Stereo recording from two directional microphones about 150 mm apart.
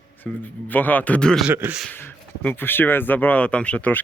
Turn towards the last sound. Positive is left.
turn(degrees=10)  # may be behind; listen again after turning